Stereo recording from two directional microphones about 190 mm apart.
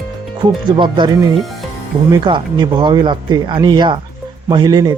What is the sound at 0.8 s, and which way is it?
Speech, 25° right (ahead or behind).